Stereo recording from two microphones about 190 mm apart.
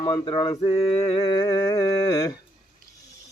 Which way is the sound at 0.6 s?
35° left (ahead or behind).